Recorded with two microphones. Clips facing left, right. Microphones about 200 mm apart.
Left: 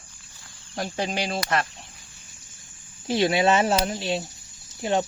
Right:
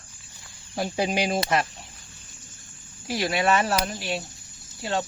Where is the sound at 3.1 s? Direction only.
25° left (ahead or behind).